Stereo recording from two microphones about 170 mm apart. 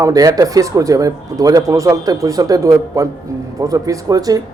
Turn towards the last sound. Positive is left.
turn(degrees=-20)  # may be behind; listen again after turning